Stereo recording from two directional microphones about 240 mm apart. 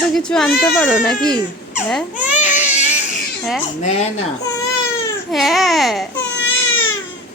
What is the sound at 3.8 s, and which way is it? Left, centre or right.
Speech, left.